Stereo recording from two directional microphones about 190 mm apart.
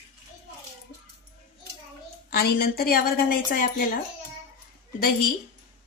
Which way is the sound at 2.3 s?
55° left (ahead or behind).